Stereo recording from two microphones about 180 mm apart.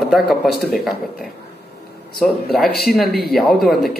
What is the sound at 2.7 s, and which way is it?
Speech, 60° left (ahead or behind).